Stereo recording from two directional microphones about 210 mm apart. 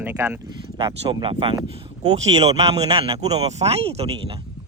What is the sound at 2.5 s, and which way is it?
Speech, 25° right (ahead or behind).